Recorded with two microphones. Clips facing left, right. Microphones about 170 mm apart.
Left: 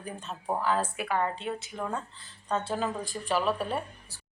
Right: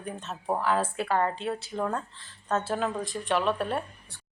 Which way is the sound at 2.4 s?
5° right (ahead or behind).